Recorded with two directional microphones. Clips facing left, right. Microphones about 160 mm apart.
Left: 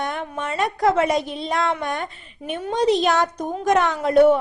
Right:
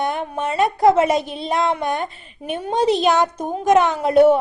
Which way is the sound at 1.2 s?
5° right (ahead or behind).